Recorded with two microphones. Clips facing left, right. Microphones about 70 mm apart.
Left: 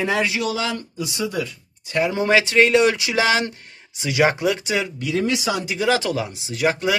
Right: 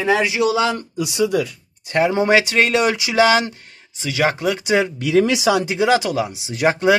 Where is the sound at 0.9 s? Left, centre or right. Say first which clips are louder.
Right 8 dB; right.